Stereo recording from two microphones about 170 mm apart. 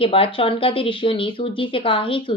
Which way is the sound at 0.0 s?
30° left (ahead or behind).